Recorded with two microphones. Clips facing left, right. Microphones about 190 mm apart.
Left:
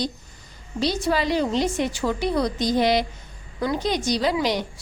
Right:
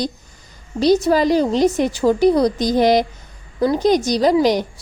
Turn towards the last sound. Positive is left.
turn(degrees=-40)  # may be behind; listen again after turning